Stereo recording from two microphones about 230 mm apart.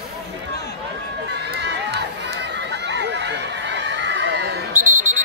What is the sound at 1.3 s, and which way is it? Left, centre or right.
Crowd, right.